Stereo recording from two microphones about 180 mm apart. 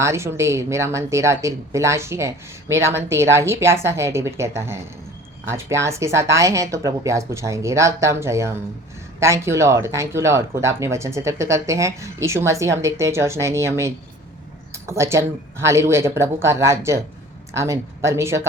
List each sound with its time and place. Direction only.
0.0 s speech: 15° right (ahead or behind)